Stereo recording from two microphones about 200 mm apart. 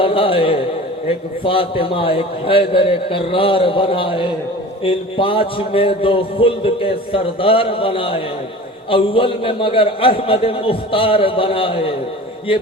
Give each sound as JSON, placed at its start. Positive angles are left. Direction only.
{"t": 0.0, "sound": "a man's voice", "side_deg": 25}